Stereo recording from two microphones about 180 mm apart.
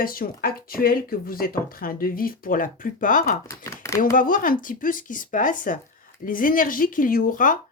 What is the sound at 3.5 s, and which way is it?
Speech, 15° left (ahead or behind).